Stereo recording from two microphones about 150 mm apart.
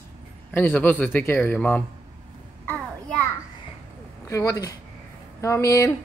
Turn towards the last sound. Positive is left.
turn(degrees=20)  # may be behind; listen again after turning